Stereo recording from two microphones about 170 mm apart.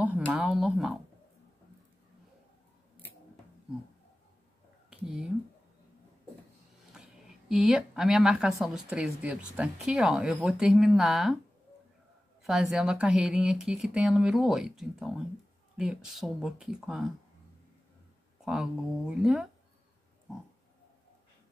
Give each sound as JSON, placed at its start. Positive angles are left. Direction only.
{"t": 0.3, "sound": "speech", "side_deg": -5}
{"t": 4.8, "sound": "a sound", "side_deg": -5}
{"t": 6.9, "sound": "speech", "side_deg": -5}
{"t": 12.4, "sound": "speech", "side_deg": -5}
{"t": 18.4, "sound": "speech", "side_deg": -5}